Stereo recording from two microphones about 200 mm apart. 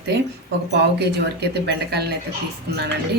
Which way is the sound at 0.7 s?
60° right (ahead or behind).